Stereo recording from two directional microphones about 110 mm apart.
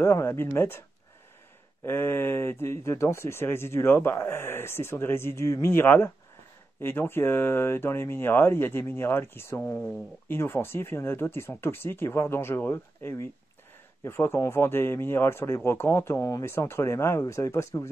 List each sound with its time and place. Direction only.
0.0 s speech: 25° left (ahead or behind)
1.9 s speech: 20° left (ahead or behind)